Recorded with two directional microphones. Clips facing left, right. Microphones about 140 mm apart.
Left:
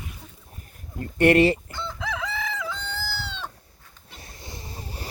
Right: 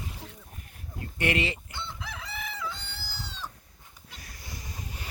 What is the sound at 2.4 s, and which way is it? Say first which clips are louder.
Chicken: left 6 dB; 90° left.